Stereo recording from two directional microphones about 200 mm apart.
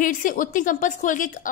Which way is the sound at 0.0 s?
40° left (ahead or behind).